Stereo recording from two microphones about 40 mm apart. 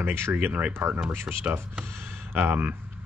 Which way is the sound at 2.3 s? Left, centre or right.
Right.